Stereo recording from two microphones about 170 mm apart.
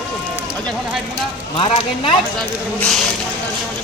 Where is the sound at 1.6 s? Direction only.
35° left (ahead or behind).